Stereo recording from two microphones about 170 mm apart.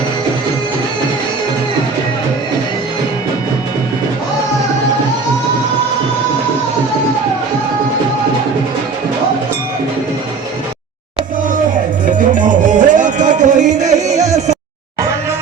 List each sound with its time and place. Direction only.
12.5 s music: 50° right (ahead or behind)